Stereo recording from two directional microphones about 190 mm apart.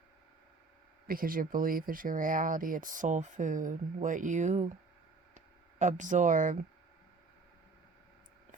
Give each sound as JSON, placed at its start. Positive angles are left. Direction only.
{"t": 1.0, "sound": "speech", "side_deg": -50}
{"t": 5.8, "sound": "speech", "side_deg": -40}